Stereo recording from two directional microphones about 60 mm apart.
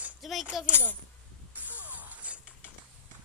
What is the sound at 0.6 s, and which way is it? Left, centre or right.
Speech, right.